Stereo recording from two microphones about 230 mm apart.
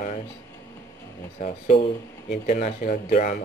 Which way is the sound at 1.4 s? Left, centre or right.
Left.